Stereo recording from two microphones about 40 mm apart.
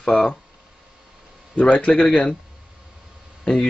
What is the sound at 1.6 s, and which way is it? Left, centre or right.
Speech, left.